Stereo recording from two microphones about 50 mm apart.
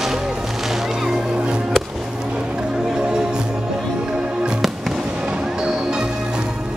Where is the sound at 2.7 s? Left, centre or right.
Centre.